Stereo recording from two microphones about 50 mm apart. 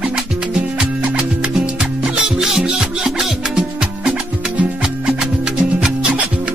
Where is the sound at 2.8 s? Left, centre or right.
Centre.